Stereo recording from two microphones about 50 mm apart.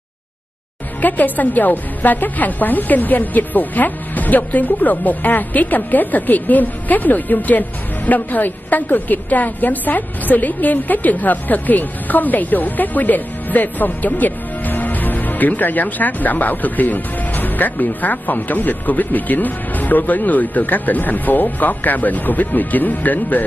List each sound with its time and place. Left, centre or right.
1.0 s a woman's voice: left